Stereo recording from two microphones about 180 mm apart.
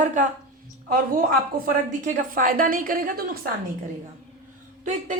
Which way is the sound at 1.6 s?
50° right (ahead or behind).